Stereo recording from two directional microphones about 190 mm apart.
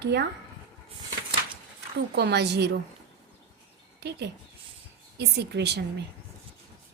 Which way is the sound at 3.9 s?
60° right (ahead or behind).